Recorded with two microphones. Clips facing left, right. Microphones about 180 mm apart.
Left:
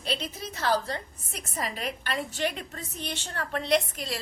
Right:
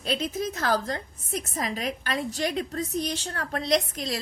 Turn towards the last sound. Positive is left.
turn(degrees=-40)  # may be behind; listen again after turning